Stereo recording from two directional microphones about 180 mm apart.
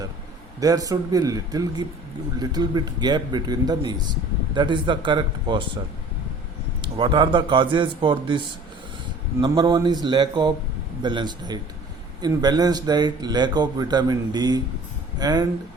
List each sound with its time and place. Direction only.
0.6 s a man's voice: 20° right (ahead or behind)
6.8 s a man's voice: 25° right (ahead or behind)
9.4 s a man's voice: 25° right (ahead or behind)